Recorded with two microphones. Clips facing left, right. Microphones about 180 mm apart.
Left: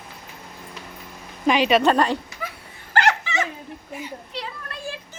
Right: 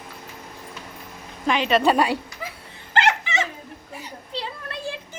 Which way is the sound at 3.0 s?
20° right (ahead or behind).